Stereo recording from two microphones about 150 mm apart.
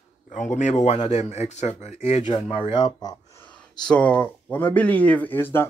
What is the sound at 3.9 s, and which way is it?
Speech, 10° left (ahead or behind).